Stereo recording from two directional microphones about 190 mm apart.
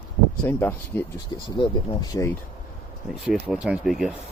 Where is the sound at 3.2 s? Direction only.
5° right (ahead or behind).